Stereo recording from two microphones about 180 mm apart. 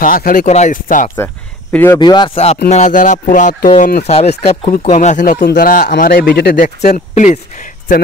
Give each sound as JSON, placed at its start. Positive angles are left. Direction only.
{"t": 0.0, "sound": "speech", "side_deg": 50}
{"t": 1.1, "sound": "speech", "side_deg": 10}
{"t": 2.0, "sound": "speech", "side_deg": 25}